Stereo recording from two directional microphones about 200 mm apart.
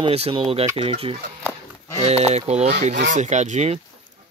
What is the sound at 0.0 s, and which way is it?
Speech, 30° right (ahead or behind).